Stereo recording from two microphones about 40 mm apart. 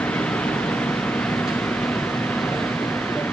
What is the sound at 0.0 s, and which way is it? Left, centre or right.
Vehicle, left.